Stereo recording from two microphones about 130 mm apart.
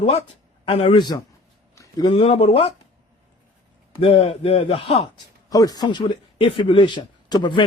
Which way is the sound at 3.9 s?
45° left (ahead or behind).